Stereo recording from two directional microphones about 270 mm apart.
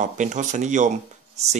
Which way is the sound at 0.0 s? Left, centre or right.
Right.